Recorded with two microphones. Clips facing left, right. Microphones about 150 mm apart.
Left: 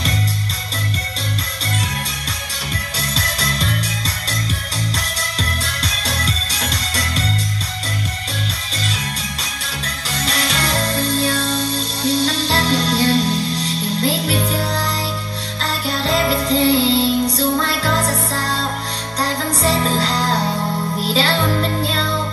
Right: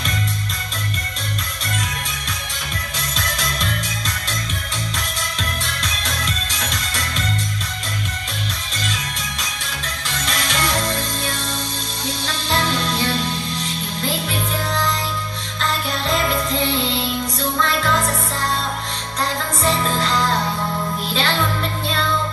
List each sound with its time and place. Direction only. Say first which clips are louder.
3.2 s music: left 1 dB; 35° left (ahead or behind)
4.9 s music: left 2 dB; 35° left (ahead or behind)
10.0 s music: left 3 dB; 35° left (ahead or behind)